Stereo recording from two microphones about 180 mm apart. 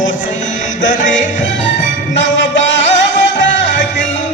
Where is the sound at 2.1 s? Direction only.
90° left.